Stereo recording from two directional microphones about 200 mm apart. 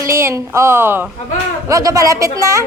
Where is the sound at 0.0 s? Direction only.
15° right (ahead or behind).